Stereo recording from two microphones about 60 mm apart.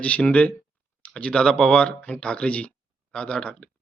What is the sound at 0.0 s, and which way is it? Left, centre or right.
Speech, left.